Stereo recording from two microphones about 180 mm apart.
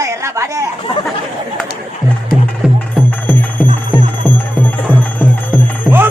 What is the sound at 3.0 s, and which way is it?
Music, 10° left (ahead or behind).